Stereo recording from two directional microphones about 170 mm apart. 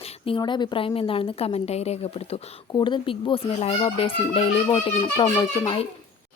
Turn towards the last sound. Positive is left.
turn(degrees=30)  # may be behind; listen again after turning